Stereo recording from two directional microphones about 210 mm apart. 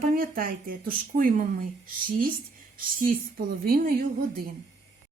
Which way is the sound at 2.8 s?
40° right (ahead or behind).